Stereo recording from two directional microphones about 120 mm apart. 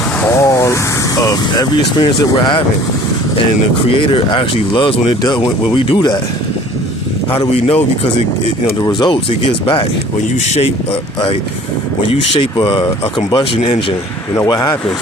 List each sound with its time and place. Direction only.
0.2 s speech: 20° left (ahead or behind)
2.4 s speech: 40° left (ahead or behind)
3.8 s speech: 45° left (ahead or behind)
7.3 s speech: 50° left (ahead or behind)
8.8 s speech: 35° left (ahead or behind)
10.4 s speech: 65° left (ahead or behind)
12.0 s speech: 50° left (ahead or behind)
14.3 s speech: 30° left (ahead or behind)